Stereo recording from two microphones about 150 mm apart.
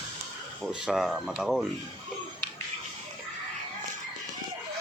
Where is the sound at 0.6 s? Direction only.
5° right (ahead or behind).